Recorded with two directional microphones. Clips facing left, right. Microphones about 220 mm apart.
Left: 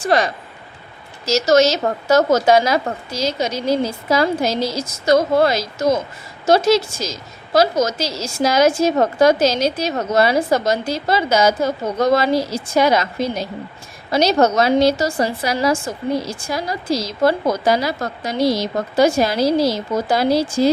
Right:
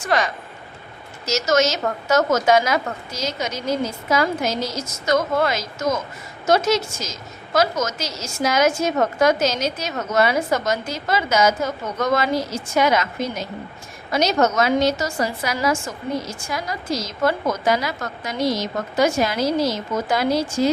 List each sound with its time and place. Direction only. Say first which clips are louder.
0.0 s a woman's voice: left 4 dB; 35° left (ahead or behind)